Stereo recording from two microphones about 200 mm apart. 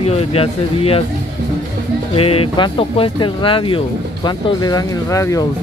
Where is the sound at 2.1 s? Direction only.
30° left (ahead or behind).